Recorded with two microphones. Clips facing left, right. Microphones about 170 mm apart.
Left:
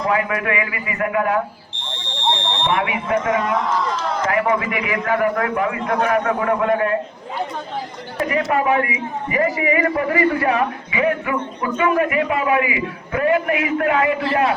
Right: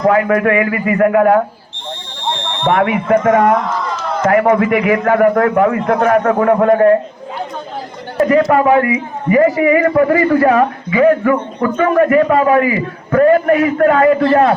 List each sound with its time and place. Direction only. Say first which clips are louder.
0.1 s a man's voice: right 8 dB; 45° right (ahead or behind)
2.6 s a man's voice: right 9 dB; 50° right (ahead or behind)
8.2 s a man's voice: right 8 dB; 45° right (ahead or behind)